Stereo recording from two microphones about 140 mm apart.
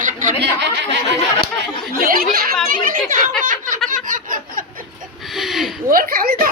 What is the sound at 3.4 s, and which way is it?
Speech, 70° right (ahead or behind).